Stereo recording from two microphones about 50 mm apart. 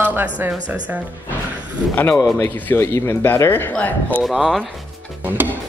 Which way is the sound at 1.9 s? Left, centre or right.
Left.